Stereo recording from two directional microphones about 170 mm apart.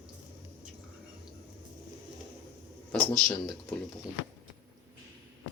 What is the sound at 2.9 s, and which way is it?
Speech, 5° left (ahead or behind).